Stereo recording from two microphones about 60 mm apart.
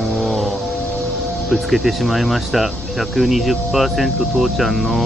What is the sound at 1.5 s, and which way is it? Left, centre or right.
Speech, centre.